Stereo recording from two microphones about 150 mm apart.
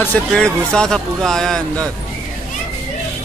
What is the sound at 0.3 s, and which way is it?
A man's voice, 5° left (ahead or behind).